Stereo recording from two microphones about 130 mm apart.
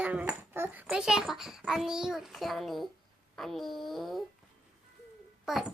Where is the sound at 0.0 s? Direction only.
10° right (ahead or behind).